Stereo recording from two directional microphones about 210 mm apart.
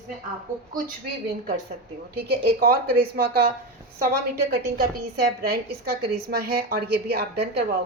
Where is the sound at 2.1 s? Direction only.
50° right (ahead or behind).